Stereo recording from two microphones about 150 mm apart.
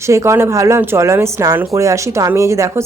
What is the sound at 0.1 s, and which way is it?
A woman's voice, 20° right (ahead or behind).